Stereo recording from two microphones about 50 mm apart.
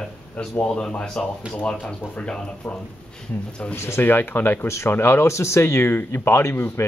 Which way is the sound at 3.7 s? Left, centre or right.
Left.